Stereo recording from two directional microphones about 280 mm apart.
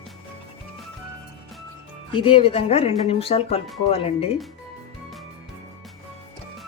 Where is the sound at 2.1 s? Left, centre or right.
Centre.